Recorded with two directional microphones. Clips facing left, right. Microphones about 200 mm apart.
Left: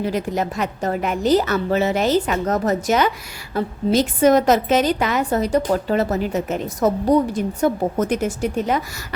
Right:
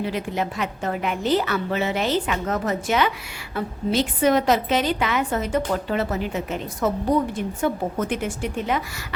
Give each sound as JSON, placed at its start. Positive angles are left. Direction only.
{"t": 0.0, "sound": "a woman's voice", "side_deg": 40}